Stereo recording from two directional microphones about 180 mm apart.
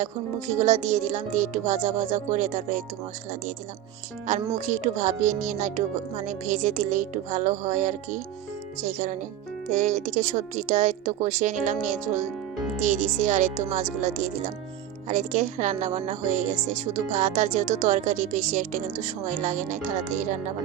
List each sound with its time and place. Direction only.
0.0 s speech: 40° right (ahead or behind)
4.3 s speech: 40° right (ahead or behind)